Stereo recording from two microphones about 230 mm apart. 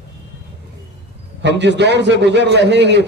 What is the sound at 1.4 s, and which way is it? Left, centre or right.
A man's voice, right.